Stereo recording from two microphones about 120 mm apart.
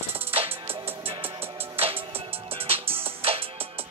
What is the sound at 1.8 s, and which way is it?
Music, 50° right (ahead or behind).